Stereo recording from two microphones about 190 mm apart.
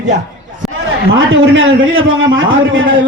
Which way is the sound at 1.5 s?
90° right.